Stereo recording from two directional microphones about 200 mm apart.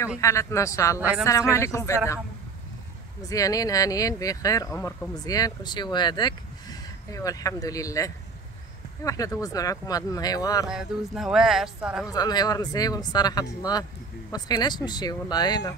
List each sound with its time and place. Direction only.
0.2 s speech: 15° left (ahead or behind)
0.9 s a woman's voice: 5° right (ahead or behind)
1.5 s speech: 15° left (ahead or behind)
3.2 s speech: 15° left (ahead or behind)
10.7 s speech: centre (ahead or behind)
12.1 s speech: 20° left (ahead or behind)